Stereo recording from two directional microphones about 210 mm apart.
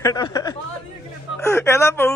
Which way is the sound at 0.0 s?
15° left (ahead or behind).